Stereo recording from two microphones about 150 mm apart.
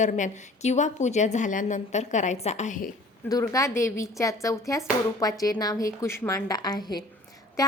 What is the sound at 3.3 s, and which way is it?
A woman's voice, 25° left (ahead or behind).